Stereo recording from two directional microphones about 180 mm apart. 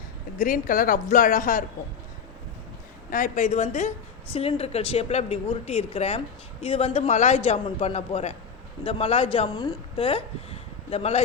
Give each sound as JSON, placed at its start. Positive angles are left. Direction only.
{"t": 0.3, "sound": "a woman's voice", "side_deg": 50}
{"t": 3.1, "sound": "speech", "side_deg": 45}